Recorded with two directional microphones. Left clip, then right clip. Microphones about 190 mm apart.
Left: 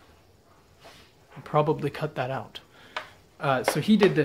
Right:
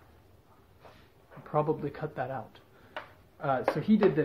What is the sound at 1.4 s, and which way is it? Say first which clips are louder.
Speech: left 5 dB; 40° left (ahead or behind).